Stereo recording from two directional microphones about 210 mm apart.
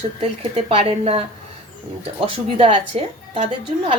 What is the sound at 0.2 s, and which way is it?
Speech, 30° right (ahead or behind).